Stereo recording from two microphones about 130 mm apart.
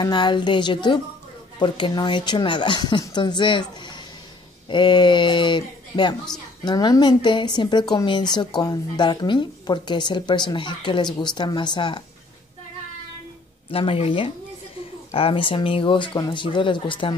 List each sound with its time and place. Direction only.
0.0 s a woman's voice: 35° left (ahead or behind)
13.7 s a woman's voice: 45° left (ahead or behind)